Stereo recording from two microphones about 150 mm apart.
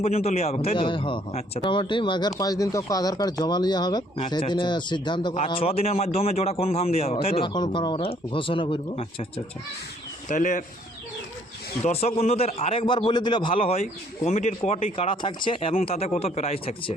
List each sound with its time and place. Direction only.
0.0 s a man's voice: 45° left (ahead or behind)
10.2 s speech: 60° left (ahead or behind)
11.8 s a man's voice: 45° left (ahead or behind)